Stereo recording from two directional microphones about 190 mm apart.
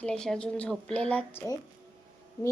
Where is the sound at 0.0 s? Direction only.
5° left (ahead or behind).